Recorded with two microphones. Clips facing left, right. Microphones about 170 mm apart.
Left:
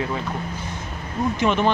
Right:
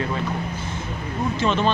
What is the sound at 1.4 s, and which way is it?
Speech, 15° left (ahead or behind).